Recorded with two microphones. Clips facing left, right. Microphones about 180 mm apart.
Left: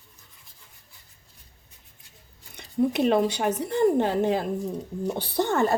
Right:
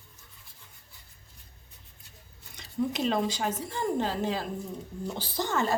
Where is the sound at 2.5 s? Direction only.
55° left (ahead or behind).